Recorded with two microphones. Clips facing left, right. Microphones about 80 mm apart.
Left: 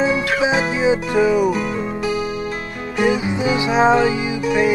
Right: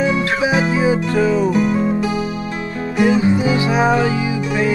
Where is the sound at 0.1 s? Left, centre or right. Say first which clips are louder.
Right 1 dB; left.